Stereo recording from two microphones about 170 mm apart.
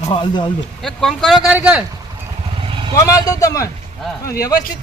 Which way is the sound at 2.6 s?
30° right (ahead or behind).